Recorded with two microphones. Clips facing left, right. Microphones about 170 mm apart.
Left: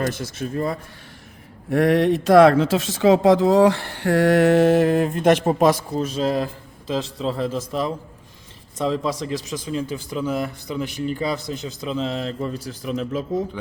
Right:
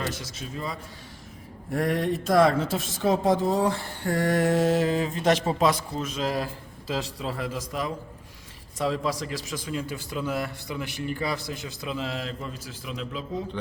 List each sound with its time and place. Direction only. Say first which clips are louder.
0.0 s a man's voice: left 8 dB; 55° left (ahead or behind)
1.7 s a man's voice: left 8 dB; 75° left (ahead or behind); by 12.3 s 25° left (ahead or behind)
12.6 s a man's voice: left 9 dB; 40° left (ahead or behind)